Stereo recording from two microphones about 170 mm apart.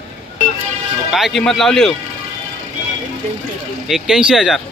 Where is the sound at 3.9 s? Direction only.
5° right (ahead or behind).